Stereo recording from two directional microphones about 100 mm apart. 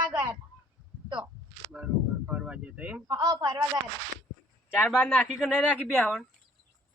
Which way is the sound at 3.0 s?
40° right (ahead or behind).